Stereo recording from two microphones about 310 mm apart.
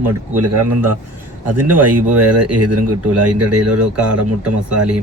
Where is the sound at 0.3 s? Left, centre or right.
Right.